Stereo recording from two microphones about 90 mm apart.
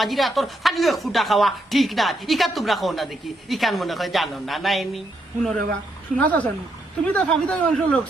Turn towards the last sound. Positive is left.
turn(degrees=10)  # may be behind; listen again after turning